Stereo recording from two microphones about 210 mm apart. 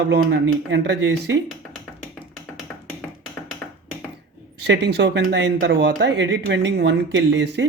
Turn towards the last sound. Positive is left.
turn(degrees=-60)  # may be behind; listen again after turning